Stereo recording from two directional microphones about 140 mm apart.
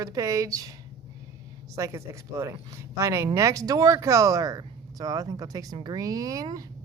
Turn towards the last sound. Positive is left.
turn(degrees=-25)  # may be behind; listen again after turning